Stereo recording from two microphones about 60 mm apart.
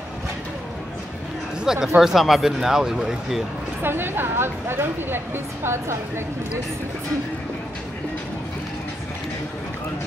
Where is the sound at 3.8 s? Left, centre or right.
Right.